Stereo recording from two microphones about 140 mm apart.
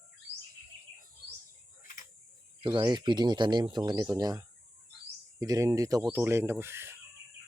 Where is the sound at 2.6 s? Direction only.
30° right (ahead or behind); by 7.0 s 15° right (ahead or behind).